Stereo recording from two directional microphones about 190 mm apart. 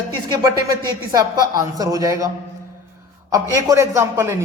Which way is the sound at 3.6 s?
15° right (ahead or behind).